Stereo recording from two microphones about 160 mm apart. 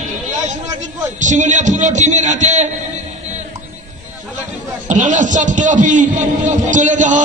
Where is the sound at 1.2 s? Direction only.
50° right (ahead or behind).